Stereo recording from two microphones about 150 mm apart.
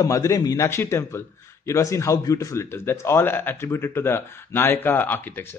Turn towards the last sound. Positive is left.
turn(degrees=10)  # may be behind; listen again after turning